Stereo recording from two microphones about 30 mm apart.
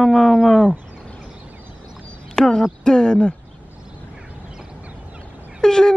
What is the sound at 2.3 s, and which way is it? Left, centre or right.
Speech, centre.